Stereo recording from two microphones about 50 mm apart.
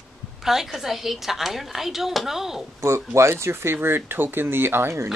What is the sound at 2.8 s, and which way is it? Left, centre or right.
Speech, right.